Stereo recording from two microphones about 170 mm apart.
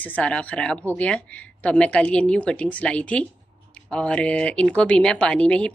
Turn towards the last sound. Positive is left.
turn(degrees=5)  # may be behind; listen again after turning